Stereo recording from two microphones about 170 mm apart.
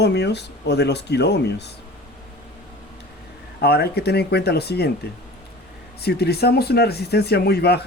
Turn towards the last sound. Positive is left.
turn(degrees=70)  # may be behind; listen again after turning